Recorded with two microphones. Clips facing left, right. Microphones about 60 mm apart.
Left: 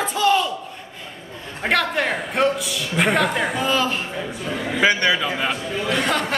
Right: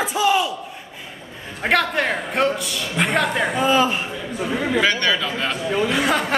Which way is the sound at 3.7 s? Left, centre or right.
Centre.